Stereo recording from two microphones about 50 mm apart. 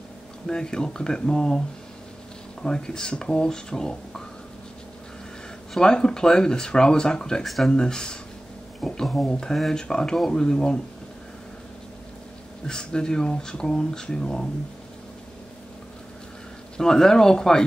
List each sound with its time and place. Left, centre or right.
0.5 s speech: centre
2.6 s speech: centre
5.8 s speech: centre
7.4 s speech: centre
7.7 s speech: centre
12.6 s speech: centre
16.7 s speech: centre